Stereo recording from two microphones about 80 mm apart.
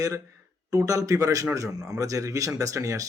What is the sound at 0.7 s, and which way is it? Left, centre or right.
Speech, right.